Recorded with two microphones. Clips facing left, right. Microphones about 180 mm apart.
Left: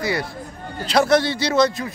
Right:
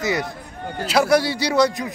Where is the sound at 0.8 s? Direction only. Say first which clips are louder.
Even; 10° right (ahead or behind).